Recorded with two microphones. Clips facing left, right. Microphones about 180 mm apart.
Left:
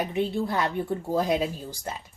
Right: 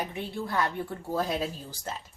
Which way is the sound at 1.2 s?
15° left (ahead or behind).